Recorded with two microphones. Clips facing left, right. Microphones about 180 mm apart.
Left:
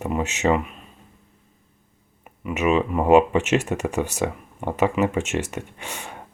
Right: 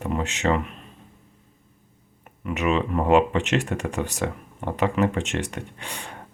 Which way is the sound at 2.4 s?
10° left (ahead or behind).